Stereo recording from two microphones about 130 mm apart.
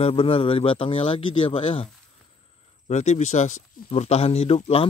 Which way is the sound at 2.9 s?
65° left (ahead or behind).